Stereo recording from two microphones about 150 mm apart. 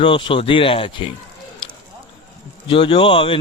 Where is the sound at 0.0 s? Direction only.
35° left (ahead or behind).